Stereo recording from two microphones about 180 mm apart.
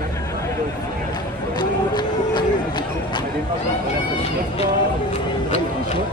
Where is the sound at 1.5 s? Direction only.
25° left (ahead or behind).